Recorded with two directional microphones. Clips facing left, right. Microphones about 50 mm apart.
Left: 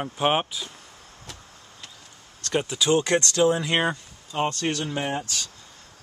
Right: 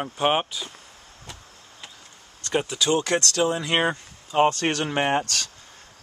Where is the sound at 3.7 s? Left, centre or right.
Centre.